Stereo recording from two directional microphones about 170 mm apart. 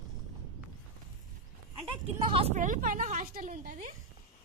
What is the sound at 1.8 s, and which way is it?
A woman's voice, 30° right (ahead or behind).